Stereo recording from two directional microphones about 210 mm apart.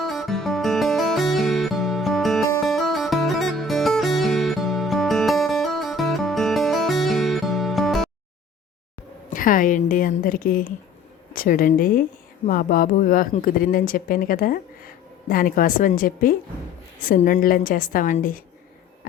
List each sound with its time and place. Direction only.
0.0 s music: centre (ahead or behind)
9.3 s a woman's voice: 40° left (ahead or behind)